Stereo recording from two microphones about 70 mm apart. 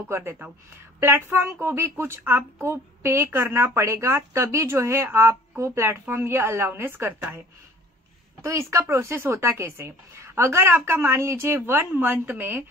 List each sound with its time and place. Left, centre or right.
0.1 s a woman's voice: right
8.4 s a woman's voice: right